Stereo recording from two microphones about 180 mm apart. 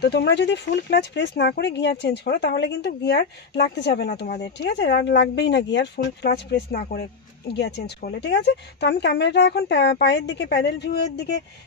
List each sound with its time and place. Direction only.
0.0 s speech: 70° left (ahead or behind)
6.8 s speech: 55° left (ahead or behind)
7.5 s speech: 65° left (ahead or behind)
10.7 s speech: 65° left (ahead or behind)